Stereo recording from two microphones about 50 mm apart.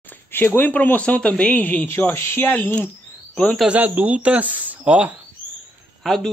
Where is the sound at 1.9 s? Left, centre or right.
Left.